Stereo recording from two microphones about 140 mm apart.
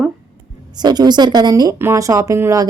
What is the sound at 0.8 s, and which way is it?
A woman's voice, 30° right (ahead or behind).